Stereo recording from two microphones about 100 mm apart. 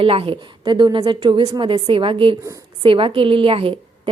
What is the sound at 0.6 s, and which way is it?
A woman's voice, 50° right (ahead or behind).